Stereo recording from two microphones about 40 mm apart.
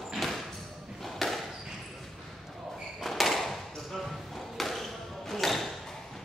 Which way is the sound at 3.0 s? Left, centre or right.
Centre.